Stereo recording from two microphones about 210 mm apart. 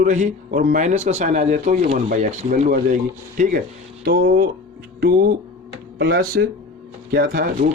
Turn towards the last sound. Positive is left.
turn(degrees=-45)  # may be behind; listen again after turning